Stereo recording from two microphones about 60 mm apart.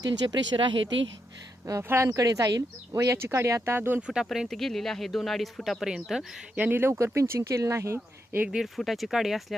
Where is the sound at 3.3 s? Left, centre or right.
Right.